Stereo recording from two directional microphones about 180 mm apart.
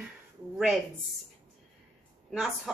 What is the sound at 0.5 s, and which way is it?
Speech, 5° right (ahead or behind).